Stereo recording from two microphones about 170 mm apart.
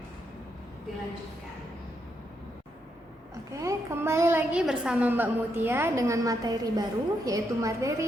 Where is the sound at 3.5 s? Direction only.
15° right (ahead or behind).